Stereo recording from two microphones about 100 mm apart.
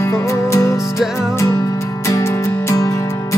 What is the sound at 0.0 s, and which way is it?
Music, 30° left (ahead or behind).